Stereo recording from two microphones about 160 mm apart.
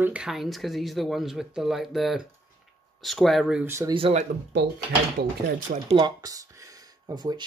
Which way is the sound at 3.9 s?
35° right (ahead or behind).